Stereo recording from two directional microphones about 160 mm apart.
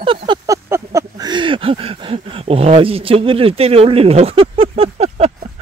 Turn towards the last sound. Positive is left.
turn(degrees=-40)  # may be behind; listen again after turning